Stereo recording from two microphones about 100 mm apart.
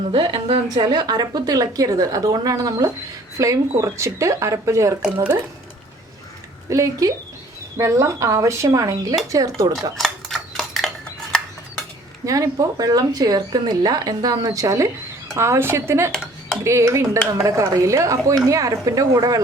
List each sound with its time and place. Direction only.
0.1 s a woman's voice: 65° right (ahead or behind)
0.9 s speech: 45° right (ahead or behind)
6.7 s speech: 30° right (ahead or behind)
10.0 s a sound: centre (ahead or behind)
12.2 s speech: 35° right (ahead or behind)